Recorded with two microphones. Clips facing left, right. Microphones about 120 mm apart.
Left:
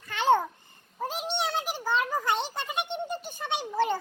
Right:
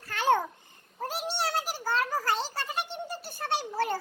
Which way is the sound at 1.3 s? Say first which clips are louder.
Even; 5° right (ahead or behind).